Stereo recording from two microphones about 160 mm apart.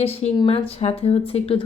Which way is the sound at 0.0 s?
35° left (ahead or behind).